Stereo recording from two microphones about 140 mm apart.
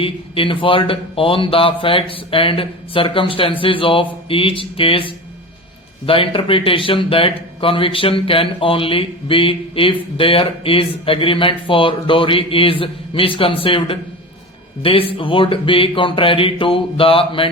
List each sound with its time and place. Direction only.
0.0 s speech: 40° left (ahead or behind)